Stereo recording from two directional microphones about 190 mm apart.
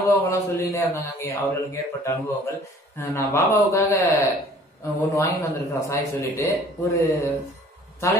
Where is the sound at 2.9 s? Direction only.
15° left (ahead or behind).